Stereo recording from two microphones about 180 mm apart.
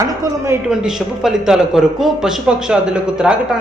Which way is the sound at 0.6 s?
5° right (ahead or behind).